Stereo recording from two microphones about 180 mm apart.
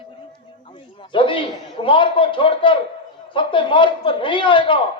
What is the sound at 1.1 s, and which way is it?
Speech, 30° left (ahead or behind).